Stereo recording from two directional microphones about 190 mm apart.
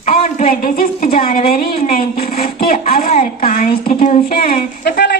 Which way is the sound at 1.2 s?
45° left (ahead or behind).